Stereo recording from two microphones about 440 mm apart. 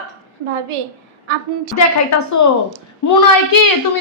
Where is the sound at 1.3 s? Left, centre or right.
Right.